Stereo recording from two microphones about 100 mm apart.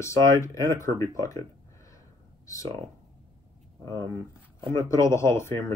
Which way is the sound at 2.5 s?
35° left (ahead or behind).